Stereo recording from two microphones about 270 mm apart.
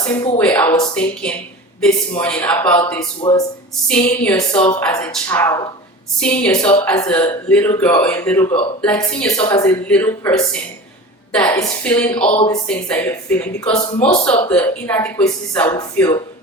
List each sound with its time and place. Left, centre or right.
0.0 s speech: centre
3.8 s speech: centre
12.3 s speech: centre
12.6 s speech: centre